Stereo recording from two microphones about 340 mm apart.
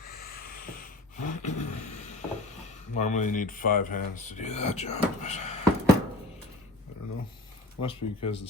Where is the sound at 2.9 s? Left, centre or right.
Left.